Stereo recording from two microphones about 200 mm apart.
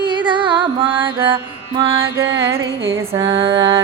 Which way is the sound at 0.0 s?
25° right (ahead or behind).